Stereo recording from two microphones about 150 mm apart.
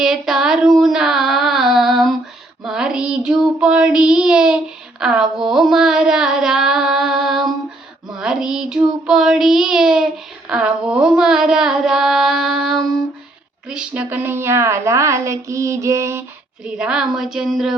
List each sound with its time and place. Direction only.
0.0 s a sound: centre (ahead or behind)
2.6 s child singing: 5° right (ahead or behind)
8.1 s female singing: 5° right (ahead or behind)
9.0 s child singing: 5° right (ahead or behind)
10.5 s a sound: 5° right (ahead or behind)
13.7 s a woman's voice: 5° right (ahead or behind)
16.6 s speech: 5° right (ahead or behind)